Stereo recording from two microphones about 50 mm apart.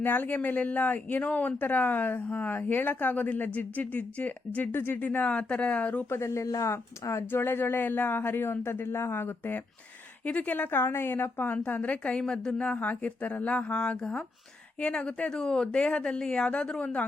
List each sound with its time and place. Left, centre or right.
0.0 s speech: left
4.7 s speech: left
4.9 s speech: left
6.1 s speech: left
7.3 s speech: left
10.2 s speech: left